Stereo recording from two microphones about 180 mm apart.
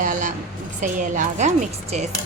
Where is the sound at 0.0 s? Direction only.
45° right (ahead or behind).